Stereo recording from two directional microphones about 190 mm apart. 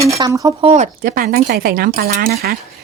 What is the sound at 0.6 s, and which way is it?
A woman's voice, 35° right (ahead or behind).